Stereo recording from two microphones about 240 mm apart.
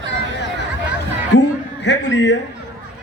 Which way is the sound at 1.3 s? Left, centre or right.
Left.